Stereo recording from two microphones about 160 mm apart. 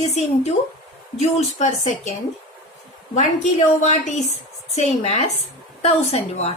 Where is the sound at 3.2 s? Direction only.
45° left (ahead or behind).